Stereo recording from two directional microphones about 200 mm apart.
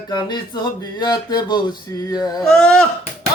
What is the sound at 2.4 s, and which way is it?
Speech, 5° left (ahead or behind).